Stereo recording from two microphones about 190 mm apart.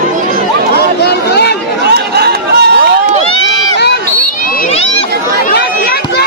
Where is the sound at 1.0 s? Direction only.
60° left (ahead or behind).